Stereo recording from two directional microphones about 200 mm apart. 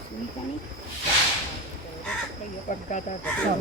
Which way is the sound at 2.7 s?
40° left (ahead or behind).